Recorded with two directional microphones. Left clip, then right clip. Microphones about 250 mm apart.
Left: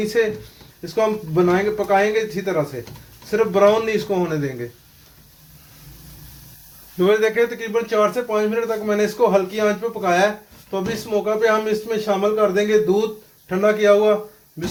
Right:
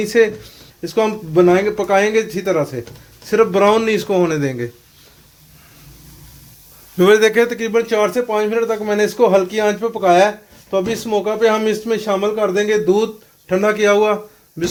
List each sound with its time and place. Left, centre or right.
0.1 s a man's voice: right
7.0 s a man's voice: right